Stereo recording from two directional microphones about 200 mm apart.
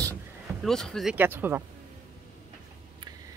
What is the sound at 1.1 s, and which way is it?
Speech, 10° right (ahead or behind).